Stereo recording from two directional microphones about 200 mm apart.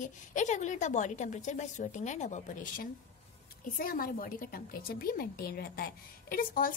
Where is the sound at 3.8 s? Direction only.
45° left (ahead or behind).